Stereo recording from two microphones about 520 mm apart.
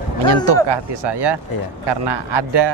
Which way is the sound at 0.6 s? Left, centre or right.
Right.